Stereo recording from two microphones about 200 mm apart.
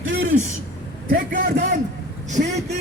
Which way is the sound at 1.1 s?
45° right (ahead or behind).